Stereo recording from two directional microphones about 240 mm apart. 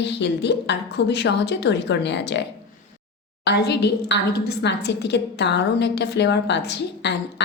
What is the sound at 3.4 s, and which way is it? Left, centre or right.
A woman's voice, left.